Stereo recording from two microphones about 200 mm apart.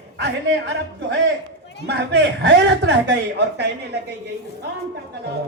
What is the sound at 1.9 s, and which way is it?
A man's voice, 60° right (ahead or behind).